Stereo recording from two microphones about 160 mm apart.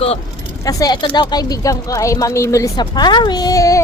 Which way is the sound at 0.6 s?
20° left (ahead or behind).